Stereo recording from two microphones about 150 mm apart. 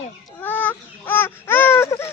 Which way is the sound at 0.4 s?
10° left (ahead or behind).